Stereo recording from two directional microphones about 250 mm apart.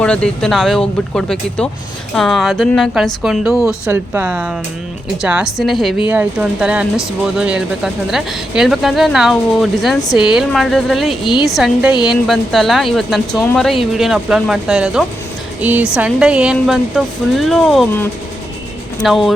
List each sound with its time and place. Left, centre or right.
0.0 s speech: centre